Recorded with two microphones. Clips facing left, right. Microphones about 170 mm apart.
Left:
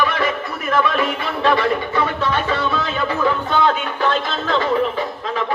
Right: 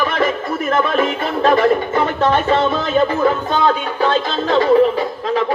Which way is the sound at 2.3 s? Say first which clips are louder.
Right 6 dB; 50° right (ahead or behind).